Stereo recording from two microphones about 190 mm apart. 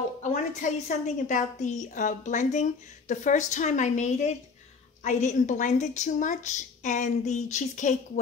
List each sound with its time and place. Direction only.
0.2 s a woman's voice: 40° left (ahead or behind)